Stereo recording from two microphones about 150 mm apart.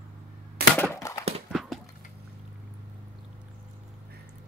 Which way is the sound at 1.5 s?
Centre (ahead or behind).